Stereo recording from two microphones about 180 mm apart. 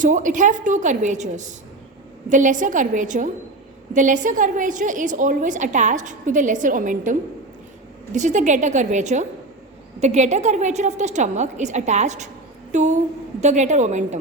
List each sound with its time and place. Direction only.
0.0 s a woman's voice: 45° right (ahead or behind)